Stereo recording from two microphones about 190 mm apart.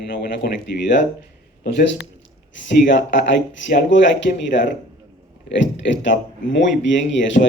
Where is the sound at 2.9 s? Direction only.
70° left (ahead or behind).